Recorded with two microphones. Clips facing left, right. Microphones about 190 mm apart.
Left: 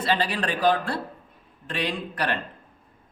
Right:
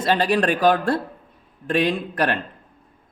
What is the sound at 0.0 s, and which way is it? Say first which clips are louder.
A man's voice: right 6 dB; 45° right (ahead or behind).